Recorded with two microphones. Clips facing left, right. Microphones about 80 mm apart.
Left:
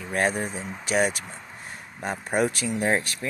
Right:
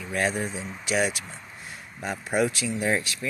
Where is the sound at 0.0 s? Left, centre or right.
Left.